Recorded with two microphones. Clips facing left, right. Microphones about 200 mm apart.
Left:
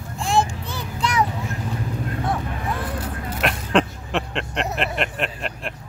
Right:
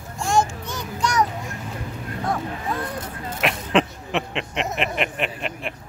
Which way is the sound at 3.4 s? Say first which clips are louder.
Even; centre (ahead or behind).